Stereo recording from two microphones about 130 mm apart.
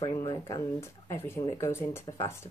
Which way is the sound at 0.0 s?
20° left (ahead or behind).